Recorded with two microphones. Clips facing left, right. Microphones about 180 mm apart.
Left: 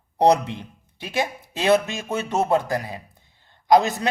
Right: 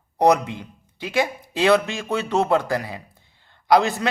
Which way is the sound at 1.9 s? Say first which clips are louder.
Right 2 dB; 20° left (ahead or behind).